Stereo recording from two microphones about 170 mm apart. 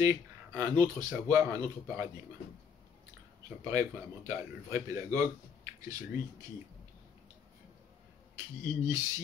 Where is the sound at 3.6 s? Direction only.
20° right (ahead or behind).